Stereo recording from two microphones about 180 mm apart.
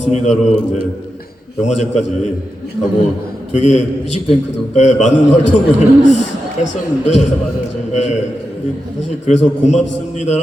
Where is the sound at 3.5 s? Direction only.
40° left (ahead or behind).